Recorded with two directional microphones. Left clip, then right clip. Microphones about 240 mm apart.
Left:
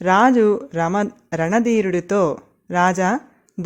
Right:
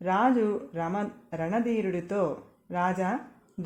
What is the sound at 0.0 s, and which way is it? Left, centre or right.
Speech, left.